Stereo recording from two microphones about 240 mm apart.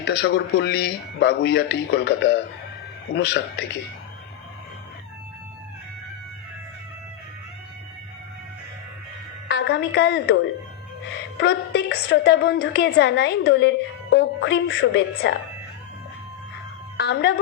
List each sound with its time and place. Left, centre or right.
0.0 s a woman's voice: left
9.5 s a woman's voice: left
11.3 s a woman's voice: left
17.0 s a woman's voice: left